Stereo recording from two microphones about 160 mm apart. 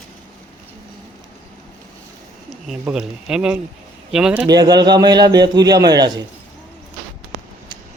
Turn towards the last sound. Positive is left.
turn(degrees=-25)  # may be behind; listen again after turning